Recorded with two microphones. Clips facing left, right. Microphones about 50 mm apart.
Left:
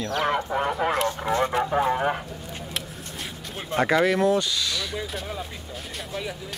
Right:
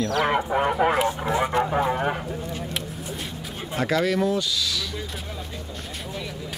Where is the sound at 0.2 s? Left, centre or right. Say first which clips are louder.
Right 1 dB; centre.